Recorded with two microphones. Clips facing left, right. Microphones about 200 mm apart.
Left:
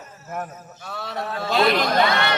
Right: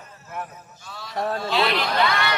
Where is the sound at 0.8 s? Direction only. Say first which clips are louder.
Right 2 dB; 60° left (ahead or behind); by 2.0 s 45° left (ahead or behind).